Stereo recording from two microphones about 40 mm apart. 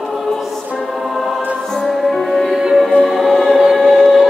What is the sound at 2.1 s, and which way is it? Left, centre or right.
Music, centre.